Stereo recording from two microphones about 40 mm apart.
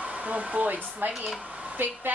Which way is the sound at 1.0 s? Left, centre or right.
Right.